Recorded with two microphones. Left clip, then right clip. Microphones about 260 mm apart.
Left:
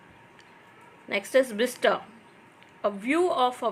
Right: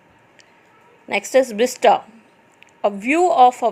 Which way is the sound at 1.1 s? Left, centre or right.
Right.